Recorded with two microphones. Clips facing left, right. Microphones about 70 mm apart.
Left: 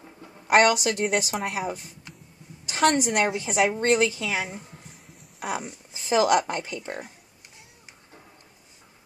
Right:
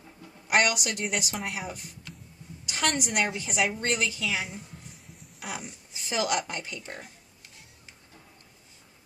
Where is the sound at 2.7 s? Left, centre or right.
Left.